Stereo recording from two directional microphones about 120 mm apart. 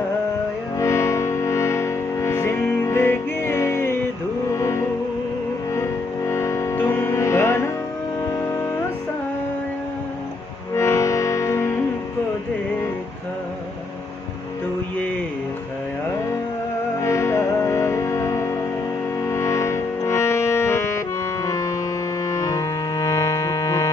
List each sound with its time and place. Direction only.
0.7 s music: 25° left (ahead or behind)
10.7 s music: 20° left (ahead or behind)
17.0 s music: 25° left (ahead or behind)